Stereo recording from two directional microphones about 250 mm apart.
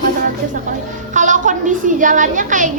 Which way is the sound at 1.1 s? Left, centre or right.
Right.